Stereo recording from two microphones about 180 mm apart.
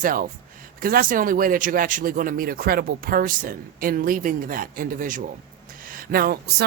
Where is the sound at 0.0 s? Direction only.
50° right (ahead or behind).